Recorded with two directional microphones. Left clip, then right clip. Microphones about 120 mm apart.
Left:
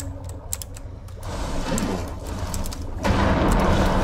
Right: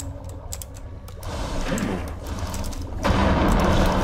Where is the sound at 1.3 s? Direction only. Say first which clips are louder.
Even; centre (ahead or behind).